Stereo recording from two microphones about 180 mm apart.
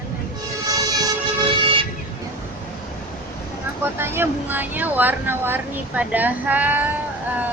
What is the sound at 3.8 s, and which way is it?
Speech, 15° right (ahead or behind).